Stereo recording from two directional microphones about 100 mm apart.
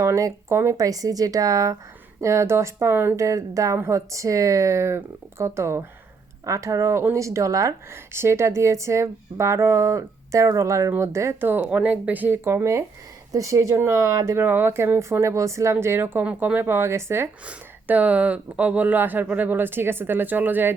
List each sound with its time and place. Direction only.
0.0 s speech: 35° right (ahead or behind)
17.4 s speech: 15° right (ahead or behind)